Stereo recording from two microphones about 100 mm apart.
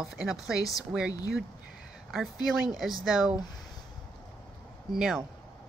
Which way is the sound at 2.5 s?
Centre (ahead or behind).